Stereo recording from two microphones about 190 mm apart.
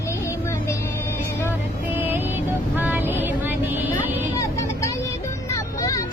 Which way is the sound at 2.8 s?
10° right (ahead or behind).